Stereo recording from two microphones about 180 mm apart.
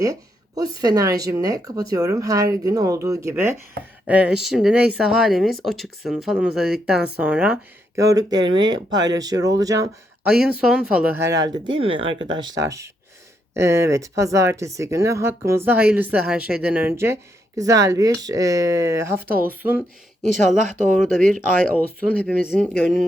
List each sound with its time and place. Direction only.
0.0 s speech: 20° right (ahead or behind)
8.0 s speech: 20° right (ahead or behind)
10.2 s speech: 5° right (ahead or behind)
20.6 s speech: 45° right (ahead or behind)
22.1 s speech: 10° left (ahead or behind)